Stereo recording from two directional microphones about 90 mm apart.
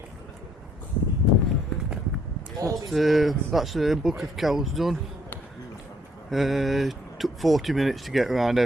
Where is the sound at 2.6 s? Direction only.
40° right (ahead or behind).